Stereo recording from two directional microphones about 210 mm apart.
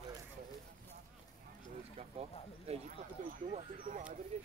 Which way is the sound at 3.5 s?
35° right (ahead or behind).